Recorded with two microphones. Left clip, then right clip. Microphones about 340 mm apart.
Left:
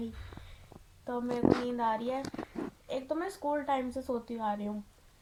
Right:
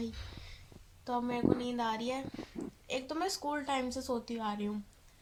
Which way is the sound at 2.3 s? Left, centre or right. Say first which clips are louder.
Left 4 dB; left.